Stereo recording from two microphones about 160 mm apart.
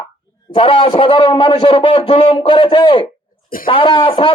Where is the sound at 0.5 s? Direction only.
35° left (ahead or behind).